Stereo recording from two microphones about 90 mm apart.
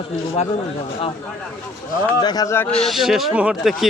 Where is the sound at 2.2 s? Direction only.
50° left (ahead or behind).